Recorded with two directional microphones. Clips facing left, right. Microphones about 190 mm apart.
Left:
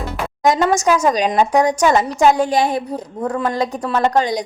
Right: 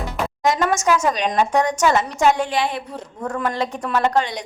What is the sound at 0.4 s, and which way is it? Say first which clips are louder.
A woman's voice: left 4 dB; 35° left (ahead or behind).